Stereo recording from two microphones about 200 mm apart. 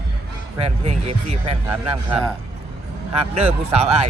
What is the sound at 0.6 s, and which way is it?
Speech, 35° right (ahead or behind).